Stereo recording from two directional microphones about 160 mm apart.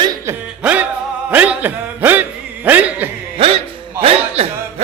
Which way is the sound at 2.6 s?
10° right (ahead or behind).